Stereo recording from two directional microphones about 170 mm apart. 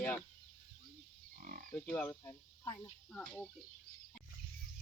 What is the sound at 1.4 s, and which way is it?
Livestock, 55° right (ahead or behind).